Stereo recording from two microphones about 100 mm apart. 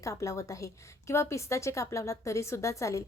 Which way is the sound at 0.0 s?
30° left (ahead or behind).